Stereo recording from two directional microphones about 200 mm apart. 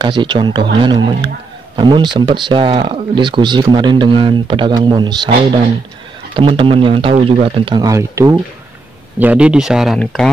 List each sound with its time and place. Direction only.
0.0 s speech: 25° right (ahead or behind)
6.3 s speech: 25° right (ahead or behind); by 10.3 s centre (ahead or behind)